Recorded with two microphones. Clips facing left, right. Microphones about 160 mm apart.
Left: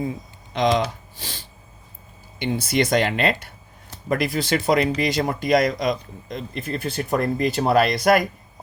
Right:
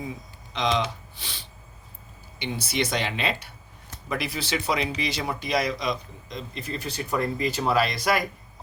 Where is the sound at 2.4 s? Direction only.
50° left (ahead or behind).